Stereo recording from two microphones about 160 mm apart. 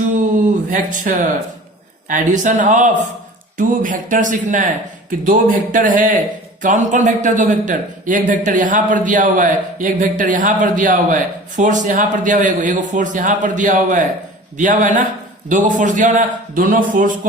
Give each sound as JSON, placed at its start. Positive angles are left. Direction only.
{"t": 0.3, "sound": "speech", "side_deg": -55}